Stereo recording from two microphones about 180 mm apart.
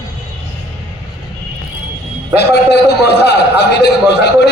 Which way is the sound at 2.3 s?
65° left (ahead or behind).